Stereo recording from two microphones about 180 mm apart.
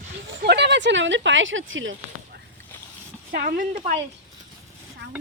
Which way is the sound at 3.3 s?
50° right (ahead or behind).